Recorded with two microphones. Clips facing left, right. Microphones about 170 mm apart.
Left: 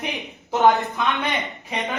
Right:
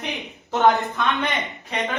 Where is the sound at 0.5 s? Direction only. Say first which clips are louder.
Left 1 dB; centre (ahead or behind).